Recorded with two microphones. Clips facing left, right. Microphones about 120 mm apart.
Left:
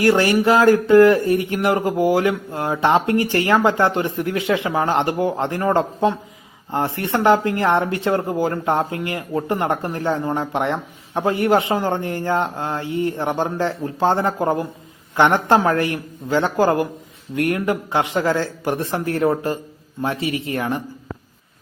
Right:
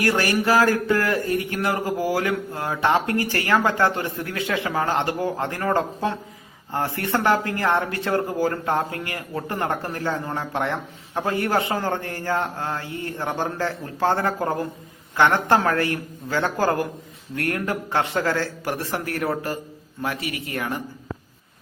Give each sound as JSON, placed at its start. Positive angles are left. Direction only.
{"t": 0.0, "sound": "speech", "side_deg": 20}